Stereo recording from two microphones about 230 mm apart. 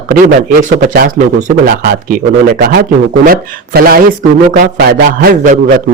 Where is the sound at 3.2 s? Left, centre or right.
Right.